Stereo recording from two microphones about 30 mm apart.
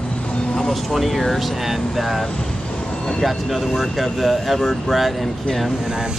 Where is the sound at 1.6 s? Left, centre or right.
Centre.